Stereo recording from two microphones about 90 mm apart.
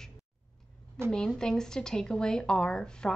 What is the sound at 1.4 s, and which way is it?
A woman's voice, 5° left (ahead or behind).